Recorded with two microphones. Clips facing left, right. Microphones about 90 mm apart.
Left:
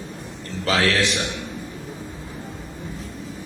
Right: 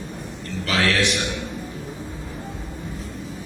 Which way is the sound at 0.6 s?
35° left (ahead or behind).